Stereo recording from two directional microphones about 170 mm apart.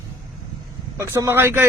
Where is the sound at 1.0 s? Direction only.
15° right (ahead or behind).